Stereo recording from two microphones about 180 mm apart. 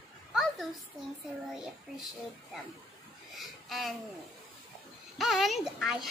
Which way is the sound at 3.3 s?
Centre (ahead or behind).